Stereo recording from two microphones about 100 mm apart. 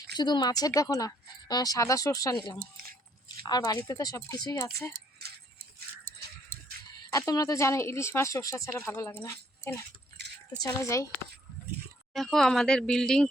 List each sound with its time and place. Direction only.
0.2 s a woman's voice: 45° left (ahead or behind)
3.8 s a woman's voice: 35° left (ahead or behind)
4.5 s a woman's voice: 30° left (ahead or behind)
7.1 s speech: 35° left (ahead or behind)
10.6 s a woman's voice: 35° left (ahead or behind)
12.1 s speech: centre (ahead or behind)